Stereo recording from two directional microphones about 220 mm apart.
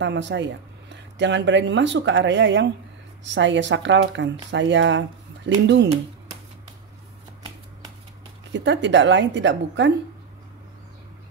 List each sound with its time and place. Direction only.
0.0 s speech: 55° right (ahead or behind)
8.5 s speech: 55° right (ahead or behind)